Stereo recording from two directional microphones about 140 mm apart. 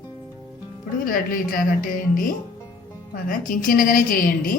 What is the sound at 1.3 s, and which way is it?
A woman's voice, 85° left.